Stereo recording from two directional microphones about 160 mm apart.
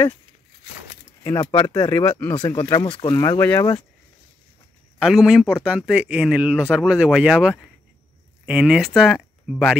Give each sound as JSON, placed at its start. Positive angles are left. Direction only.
{"t": 1.2, "sound": "speech", "side_deg": 20}
{"t": 2.3, "sound": "speech", "side_deg": 25}
{"t": 4.9, "sound": "speech", "side_deg": -5}